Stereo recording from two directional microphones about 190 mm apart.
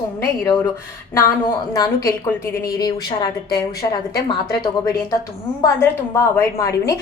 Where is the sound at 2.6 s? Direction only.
20° left (ahead or behind).